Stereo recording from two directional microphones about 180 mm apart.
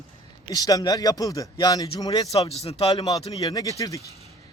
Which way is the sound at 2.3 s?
35° left (ahead or behind).